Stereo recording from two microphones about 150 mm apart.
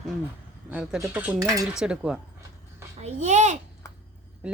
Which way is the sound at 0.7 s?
10° right (ahead or behind).